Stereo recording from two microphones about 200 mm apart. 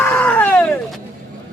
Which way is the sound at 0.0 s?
10° left (ahead or behind).